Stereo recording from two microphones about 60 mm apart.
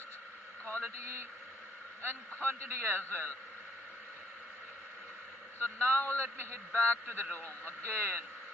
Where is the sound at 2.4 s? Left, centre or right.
Right.